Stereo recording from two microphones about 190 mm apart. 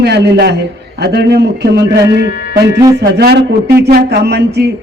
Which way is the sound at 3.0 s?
60° right (ahead or behind).